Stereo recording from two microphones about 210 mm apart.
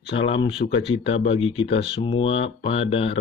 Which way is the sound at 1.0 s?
30° left (ahead or behind).